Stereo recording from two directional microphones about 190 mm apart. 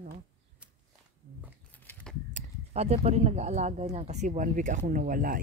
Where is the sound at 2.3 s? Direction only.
35° right (ahead or behind).